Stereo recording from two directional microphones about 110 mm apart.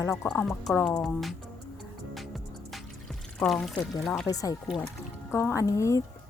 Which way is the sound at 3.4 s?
5° left (ahead or behind).